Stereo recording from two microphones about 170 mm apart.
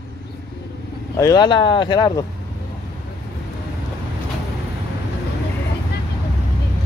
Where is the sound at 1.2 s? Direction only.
25° left (ahead or behind).